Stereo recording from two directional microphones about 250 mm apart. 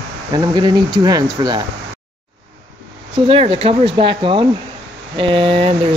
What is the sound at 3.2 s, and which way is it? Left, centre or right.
Speech, right.